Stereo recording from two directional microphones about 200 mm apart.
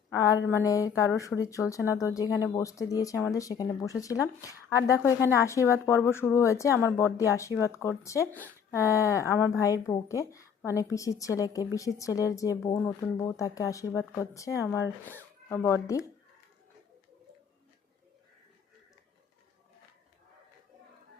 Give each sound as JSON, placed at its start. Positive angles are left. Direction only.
{"t": 0.2, "sound": "speech", "side_deg": 15}